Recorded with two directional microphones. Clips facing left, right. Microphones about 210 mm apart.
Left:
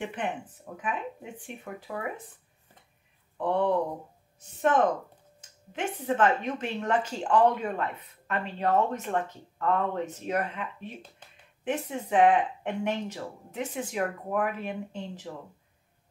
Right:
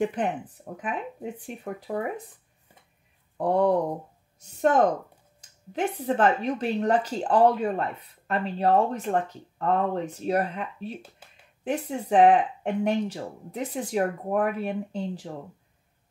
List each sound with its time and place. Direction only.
0.0 s speech: 35° right (ahead or behind)
3.3 s speech: 40° right (ahead or behind)